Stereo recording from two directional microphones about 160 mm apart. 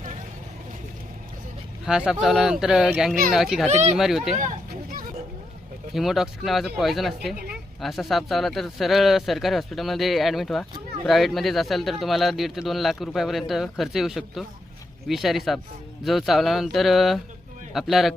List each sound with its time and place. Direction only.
1.8 s speech: 5° right (ahead or behind)
3.7 s speech: 45° right (ahead or behind)
3.9 s speech: centre (ahead or behind)
4.7 s a sound: 60° right (ahead or behind)
5.9 s speech: centre (ahead or behind)